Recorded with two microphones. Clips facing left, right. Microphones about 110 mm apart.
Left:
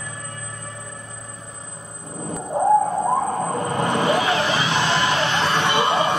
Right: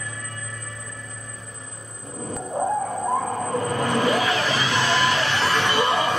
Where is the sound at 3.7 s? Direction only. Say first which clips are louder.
Left 2 dB; 25° left (ahead or behind).